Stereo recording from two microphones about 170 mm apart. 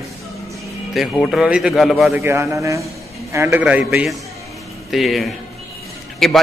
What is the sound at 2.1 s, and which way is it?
A man's voice, 15° right (ahead or behind).